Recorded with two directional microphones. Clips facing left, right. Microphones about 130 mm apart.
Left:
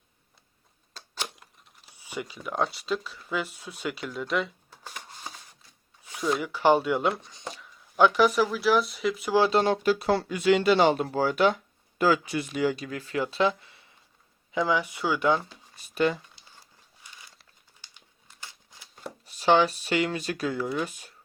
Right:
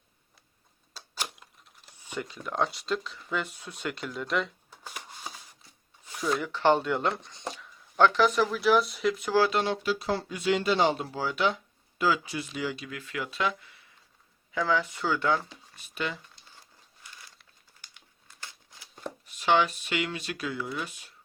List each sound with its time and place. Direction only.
0.9 s a sound: 5° right (ahead or behind)
1.7 s speech: 5° left (ahead or behind)
6.1 s a sound: centre (ahead or behind)
6.3 s speech: 10° left (ahead or behind)
9.5 s speech: 40° left (ahead or behind)
14.5 s speech: 15° left (ahead or behind)
17.9 s crumpling: 20° left (ahead or behind)
19.2 s speech: 35° left (ahead or behind)